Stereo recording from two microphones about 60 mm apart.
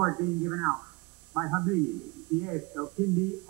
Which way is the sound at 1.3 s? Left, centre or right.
Centre.